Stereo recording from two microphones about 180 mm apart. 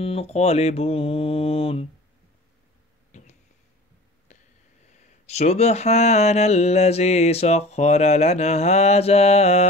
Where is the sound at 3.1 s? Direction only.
40° left (ahead or behind).